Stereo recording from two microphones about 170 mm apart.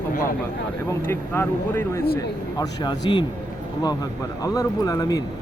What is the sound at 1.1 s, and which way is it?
Speech, 15° left (ahead or behind).